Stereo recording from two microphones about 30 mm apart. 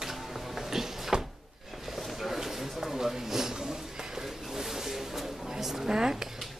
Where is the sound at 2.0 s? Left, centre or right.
Centre.